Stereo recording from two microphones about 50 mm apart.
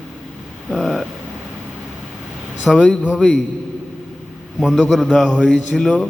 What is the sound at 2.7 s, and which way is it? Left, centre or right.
Speech, centre.